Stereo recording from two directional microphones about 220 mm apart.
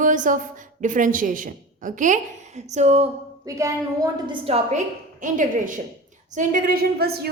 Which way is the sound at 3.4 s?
15° right (ahead or behind).